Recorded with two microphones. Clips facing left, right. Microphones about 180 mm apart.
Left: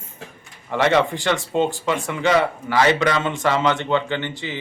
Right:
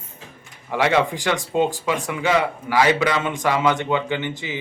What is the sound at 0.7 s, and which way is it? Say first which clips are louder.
A man's voice: left 1 dB; 10° right (ahead or behind).